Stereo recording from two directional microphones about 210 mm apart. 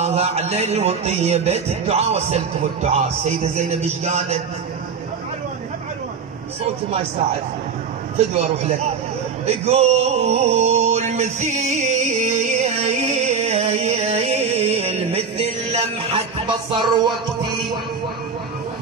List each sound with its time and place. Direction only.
0.0 s music: 30° right (ahead or behind)
8.4 s a man's voice: 30° right (ahead or behind)
9.7 s music: 30° right (ahead or behind)